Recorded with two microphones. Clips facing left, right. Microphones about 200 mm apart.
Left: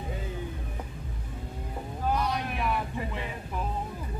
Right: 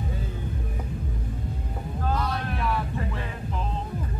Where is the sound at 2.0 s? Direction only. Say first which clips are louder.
Even; 15° left (ahead or behind).